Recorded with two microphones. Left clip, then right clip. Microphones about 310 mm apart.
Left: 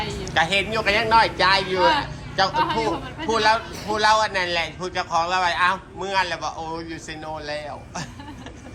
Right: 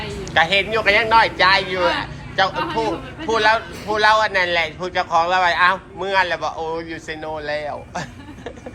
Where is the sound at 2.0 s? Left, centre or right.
Centre.